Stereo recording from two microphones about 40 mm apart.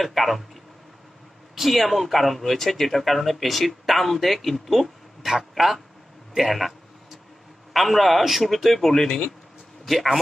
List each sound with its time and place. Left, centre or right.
0.0 s speech: centre
1.5 s a man's voice: centre
6.3 s a sound: centre
7.7 s speech: centre